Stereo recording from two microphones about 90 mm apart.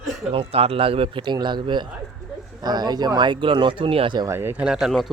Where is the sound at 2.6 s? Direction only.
50° right (ahead or behind); by 4.2 s 80° right.